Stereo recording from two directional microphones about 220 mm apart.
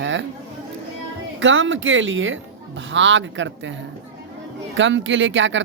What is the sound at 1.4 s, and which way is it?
Speech, 60° right (ahead or behind).